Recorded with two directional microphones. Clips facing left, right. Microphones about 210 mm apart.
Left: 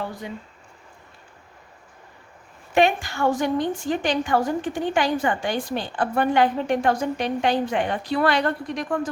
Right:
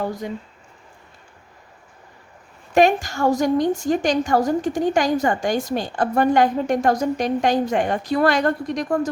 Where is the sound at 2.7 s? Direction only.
40° right (ahead or behind).